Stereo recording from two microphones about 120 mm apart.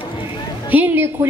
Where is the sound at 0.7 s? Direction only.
15° right (ahead or behind).